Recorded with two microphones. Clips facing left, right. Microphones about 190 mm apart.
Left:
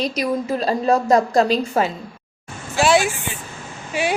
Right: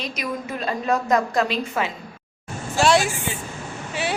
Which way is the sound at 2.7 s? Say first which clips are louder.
Left 2 dB; 5° left (ahead or behind).